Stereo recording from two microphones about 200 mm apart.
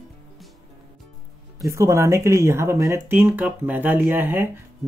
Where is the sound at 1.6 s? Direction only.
15° right (ahead or behind).